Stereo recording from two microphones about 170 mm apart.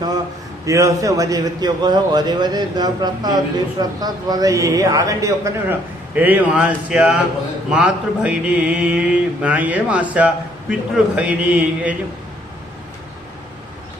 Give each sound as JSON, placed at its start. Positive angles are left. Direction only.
{"t": 0.6, "sound": "a man's voice", "side_deg": -20}
{"t": 6.1, "sound": "mantra", "side_deg": -10}